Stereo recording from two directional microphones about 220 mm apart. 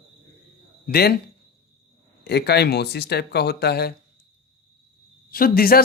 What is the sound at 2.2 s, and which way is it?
Speech, 50° left (ahead or behind).